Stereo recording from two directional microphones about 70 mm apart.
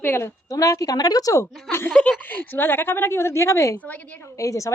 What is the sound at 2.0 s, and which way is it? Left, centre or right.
A woman's voice, left.